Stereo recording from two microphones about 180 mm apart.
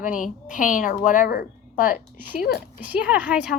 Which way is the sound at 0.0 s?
45° left (ahead or behind).